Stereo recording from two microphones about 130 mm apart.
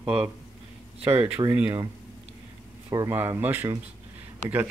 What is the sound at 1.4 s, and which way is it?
Speech, 35° right (ahead or behind).